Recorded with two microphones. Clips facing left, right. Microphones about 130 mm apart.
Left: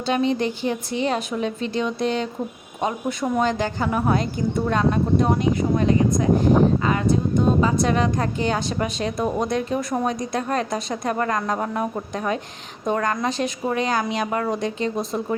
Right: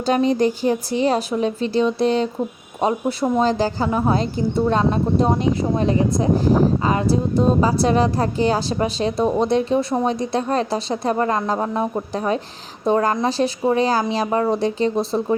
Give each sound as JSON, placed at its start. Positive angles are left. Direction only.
{"t": 0.0, "sound": "a woman's voice", "side_deg": -40}